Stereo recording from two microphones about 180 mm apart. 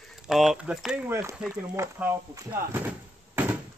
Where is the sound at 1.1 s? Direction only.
15° right (ahead or behind).